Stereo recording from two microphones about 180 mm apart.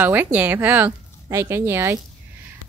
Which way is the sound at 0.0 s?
10° right (ahead or behind).